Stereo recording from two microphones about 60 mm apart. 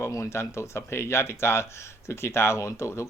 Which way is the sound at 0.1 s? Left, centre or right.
Left.